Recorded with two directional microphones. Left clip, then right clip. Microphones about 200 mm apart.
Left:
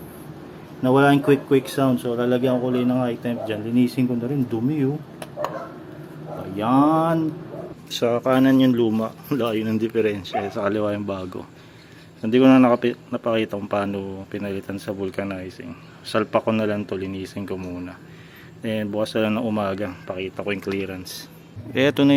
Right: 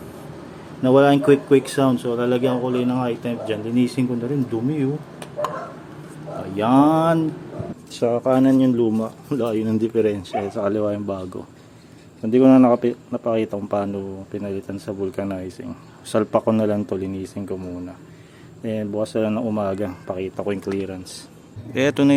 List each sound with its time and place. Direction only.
0.8 s speech: 5° right (ahead or behind)
6.6 s speech: 10° right (ahead or behind)